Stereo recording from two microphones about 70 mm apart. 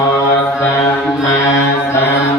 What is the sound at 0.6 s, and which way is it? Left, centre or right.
Mantra, left.